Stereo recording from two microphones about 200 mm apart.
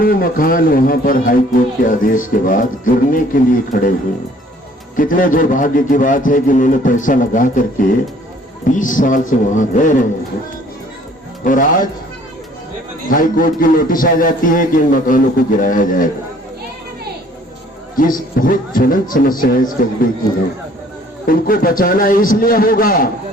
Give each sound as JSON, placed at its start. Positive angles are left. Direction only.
{"t": 0.0, "sound": "a man's voice", "side_deg": 45}
{"t": 4.9, "sound": "a man's voice", "side_deg": 45}
{"t": 11.4, "sound": "a man's voice", "side_deg": 40}
{"t": 13.1, "sound": "a man's voice", "side_deg": 45}
{"t": 17.9, "sound": "a man's voice", "side_deg": 45}
{"t": 21.2, "sound": "a man's voice", "side_deg": 45}